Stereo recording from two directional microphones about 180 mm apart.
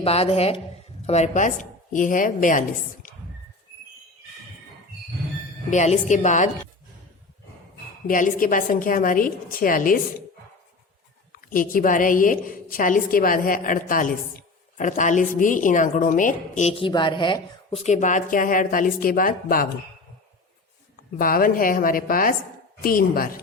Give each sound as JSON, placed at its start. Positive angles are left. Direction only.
{"t": 0.0, "sound": "a woman's voice", "side_deg": 35}
{"t": 5.7, "sound": "a woman's voice", "side_deg": 40}
{"t": 8.0, "sound": "a woman's voice", "side_deg": 50}
{"t": 11.3, "sound": "a woman's voice", "side_deg": 55}
{"t": 17.8, "sound": "a woman's voice", "side_deg": 45}
{"t": 21.2, "sound": "a woman's voice", "side_deg": 55}